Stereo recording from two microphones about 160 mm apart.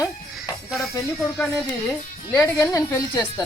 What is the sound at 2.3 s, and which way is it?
Speech, 15° left (ahead or behind).